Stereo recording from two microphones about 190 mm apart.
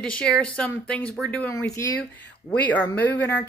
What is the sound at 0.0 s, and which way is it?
Speech, 5° left (ahead or behind).